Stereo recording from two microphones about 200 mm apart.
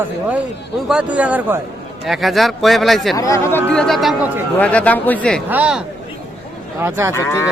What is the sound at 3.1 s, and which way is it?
Speech, 15° left (ahead or behind).